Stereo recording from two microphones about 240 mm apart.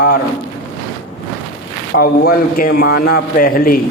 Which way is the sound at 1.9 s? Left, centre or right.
Left.